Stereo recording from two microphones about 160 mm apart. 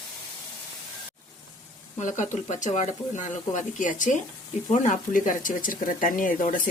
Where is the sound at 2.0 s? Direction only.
50° left (ahead or behind).